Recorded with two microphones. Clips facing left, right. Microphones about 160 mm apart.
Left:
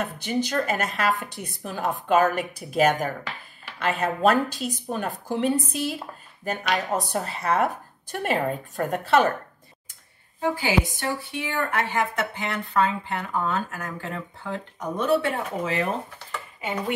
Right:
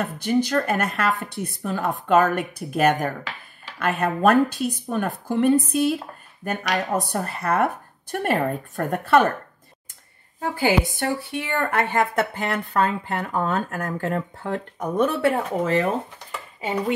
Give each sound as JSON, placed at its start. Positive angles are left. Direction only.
{"t": 0.0, "sound": "speech", "side_deg": -50}
{"t": 11.0, "sound": "speech", "side_deg": -55}